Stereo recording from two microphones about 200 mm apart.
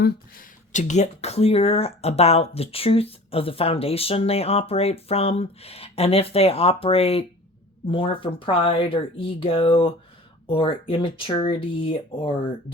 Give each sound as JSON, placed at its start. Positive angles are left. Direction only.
{"t": 0.7, "sound": "speech", "side_deg": 35}